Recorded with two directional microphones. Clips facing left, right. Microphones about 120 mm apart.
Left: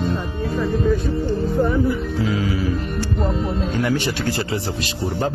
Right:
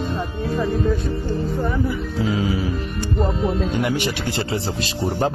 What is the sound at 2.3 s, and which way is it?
Speech, 25° right (ahead or behind).